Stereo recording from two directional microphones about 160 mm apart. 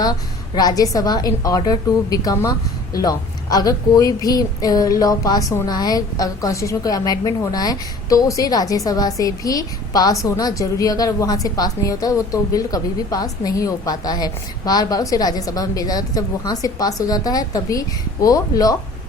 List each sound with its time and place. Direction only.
0.0 s a woman's voice: 25° left (ahead or behind)